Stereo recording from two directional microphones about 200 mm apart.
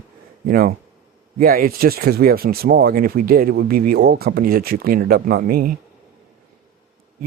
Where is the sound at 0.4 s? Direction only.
50° right (ahead or behind).